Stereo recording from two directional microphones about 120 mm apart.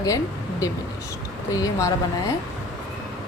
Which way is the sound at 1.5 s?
30° left (ahead or behind).